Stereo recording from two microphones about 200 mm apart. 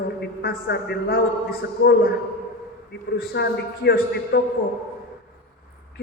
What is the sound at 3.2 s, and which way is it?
A man's voice, 50° left (ahead or behind).